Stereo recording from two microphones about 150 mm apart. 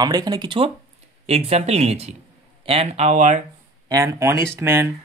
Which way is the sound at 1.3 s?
45° right (ahead or behind).